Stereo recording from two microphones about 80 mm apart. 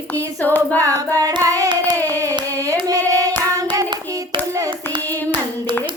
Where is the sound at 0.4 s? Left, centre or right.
Left.